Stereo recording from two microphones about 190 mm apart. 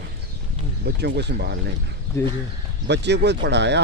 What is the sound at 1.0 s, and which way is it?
Speech, 60° right (ahead or behind).